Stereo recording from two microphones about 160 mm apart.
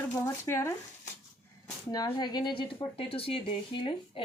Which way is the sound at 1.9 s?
25° left (ahead or behind).